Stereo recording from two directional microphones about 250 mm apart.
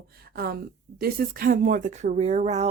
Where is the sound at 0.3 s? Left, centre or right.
Right.